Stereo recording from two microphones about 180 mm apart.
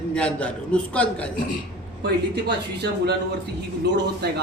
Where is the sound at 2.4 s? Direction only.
65° right (ahead or behind).